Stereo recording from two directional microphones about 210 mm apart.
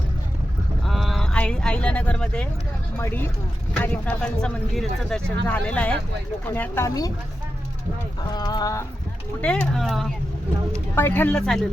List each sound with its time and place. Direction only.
0.9 s a sound: centre (ahead or behind)
3.0 s speech: 10° left (ahead or behind)
8.3 s speech: 20° left (ahead or behind)
9.4 s speech: 5° left (ahead or behind)